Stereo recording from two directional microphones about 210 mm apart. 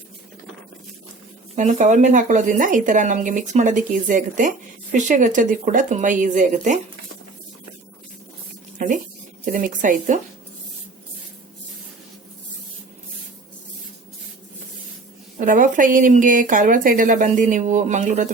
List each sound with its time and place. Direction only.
1.5 s a woman's voice: 35° right (ahead or behind)
9.5 s a woman's voice: 40° right (ahead or behind)
15.4 s a woman's voice: 40° right (ahead or behind)